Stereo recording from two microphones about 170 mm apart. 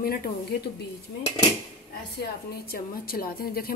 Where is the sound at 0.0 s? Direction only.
60° left (ahead or behind).